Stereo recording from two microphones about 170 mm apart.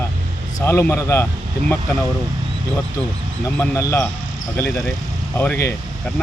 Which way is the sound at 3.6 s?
15° left (ahead or behind).